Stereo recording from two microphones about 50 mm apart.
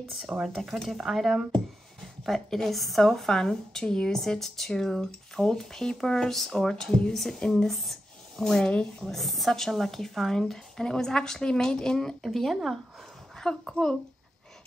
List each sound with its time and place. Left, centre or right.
0.4 s a woman's voice: centre
7.6 s speech: centre
9.1 s a woman's voice: centre
13.4 s a woman's voice: centre